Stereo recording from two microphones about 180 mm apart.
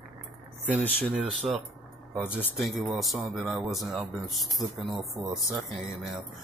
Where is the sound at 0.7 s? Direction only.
5° right (ahead or behind).